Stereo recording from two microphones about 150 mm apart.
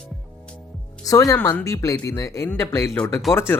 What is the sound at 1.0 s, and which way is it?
Speech, 25° left (ahead or behind).